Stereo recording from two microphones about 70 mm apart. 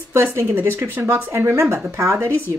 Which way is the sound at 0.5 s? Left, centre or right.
Right.